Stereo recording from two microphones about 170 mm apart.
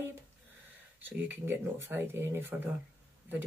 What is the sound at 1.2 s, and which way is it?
Speech, 10° right (ahead or behind).